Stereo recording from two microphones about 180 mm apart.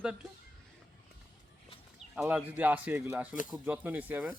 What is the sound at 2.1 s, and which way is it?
A man's voice, 10° right (ahead or behind).